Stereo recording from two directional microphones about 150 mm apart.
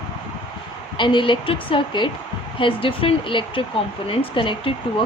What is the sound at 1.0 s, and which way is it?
A woman's voice, 30° left (ahead or behind).